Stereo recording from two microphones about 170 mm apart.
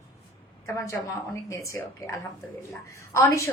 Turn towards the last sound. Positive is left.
turn(degrees=15)  # may be behind; listen again after turning